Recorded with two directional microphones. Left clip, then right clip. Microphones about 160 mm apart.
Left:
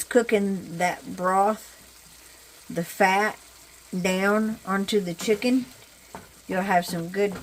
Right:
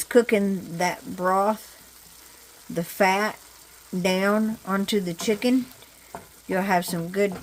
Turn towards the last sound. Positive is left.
turn(degrees=-30)  # may be behind; listen again after turning